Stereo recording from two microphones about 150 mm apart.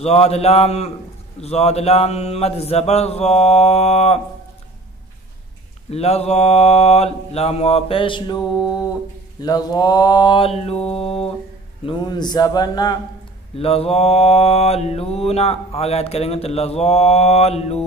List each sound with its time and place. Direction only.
0.0 s mantra: 45° left (ahead or behind)
5.9 s mantra: 45° left (ahead or behind)
11.8 s a man's voice: 30° left (ahead or behind)
13.6 s mantra: 40° left (ahead or behind)